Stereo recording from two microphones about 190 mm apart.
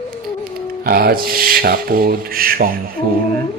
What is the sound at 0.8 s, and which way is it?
Speech, 55° right (ahead or behind).